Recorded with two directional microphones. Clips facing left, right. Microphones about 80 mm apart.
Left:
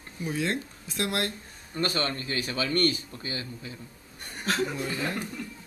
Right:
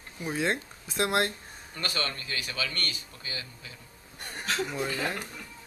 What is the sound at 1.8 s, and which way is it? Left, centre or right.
A man's voice, left.